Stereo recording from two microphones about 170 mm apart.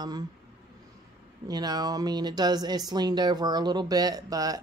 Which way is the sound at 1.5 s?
25° right (ahead or behind).